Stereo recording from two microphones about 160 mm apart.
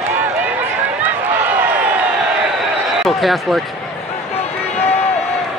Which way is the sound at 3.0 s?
Centre (ahead or behind).